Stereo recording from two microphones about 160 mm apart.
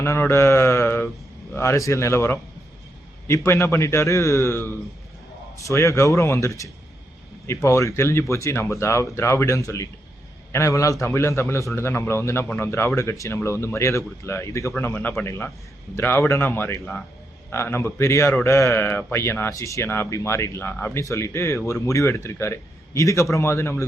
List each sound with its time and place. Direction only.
0.0 s a man's voice: 15° left (ahead or behind)